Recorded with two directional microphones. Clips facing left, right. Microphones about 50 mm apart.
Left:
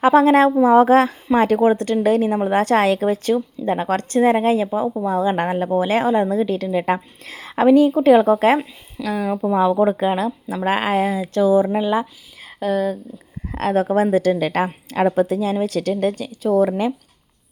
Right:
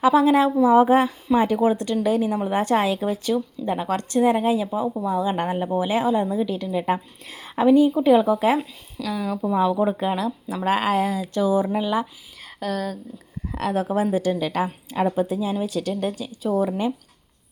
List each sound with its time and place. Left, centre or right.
0.0 s speech: left
0.8 s a woman's voice: left
1.4 s a woman's voice: left
2.5 s a woman's voice: left
3.7 s speech: left
5.4 s a woman's voice: left
5.7 s a woman's voice: left
9.0 s speech: left
9.4 s speech: left
10.5 s speech: left
12.4 s a sound: centre
13.5 s speech: left
14.8 s a woman's voice: left
15.6 s a woman's voice: left